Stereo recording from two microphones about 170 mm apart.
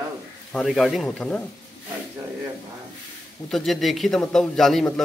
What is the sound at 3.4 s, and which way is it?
A man's voice, centre (ahead or behind).